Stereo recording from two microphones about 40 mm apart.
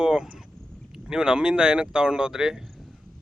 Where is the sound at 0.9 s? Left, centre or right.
Centre.